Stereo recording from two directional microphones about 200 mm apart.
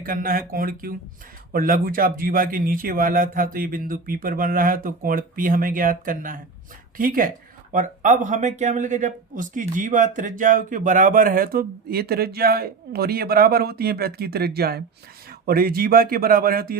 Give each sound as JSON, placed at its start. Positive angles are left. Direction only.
{"t": 0.0, "sound": "speech", "side_deg": -45}